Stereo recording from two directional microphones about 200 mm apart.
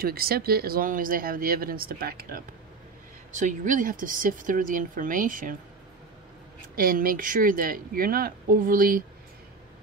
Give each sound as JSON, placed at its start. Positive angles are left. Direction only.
{"t": 0.0, "sound": "speech", "side_deg": -50}
{"t": 6.7, "sound": "speech", "side_deg": -45}